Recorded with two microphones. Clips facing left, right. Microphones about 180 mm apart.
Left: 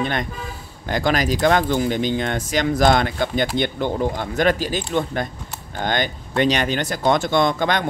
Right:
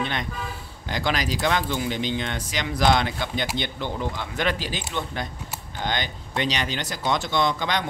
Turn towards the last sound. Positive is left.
turn(degrees=50)  # may be behind; listen again after turning